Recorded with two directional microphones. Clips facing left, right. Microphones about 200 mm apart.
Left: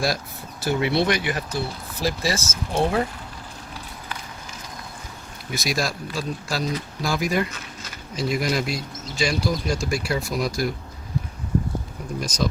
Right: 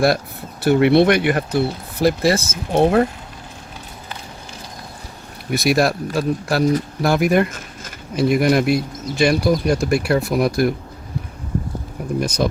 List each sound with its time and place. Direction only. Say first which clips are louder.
0.6 s speech: right 9 dB; 60° right (ahead or behind)
5.5 s speech: right 9 dB; 60° right (ahead or behind)
12.2 s speech: right 5 dB; 60° right (ahead or behind)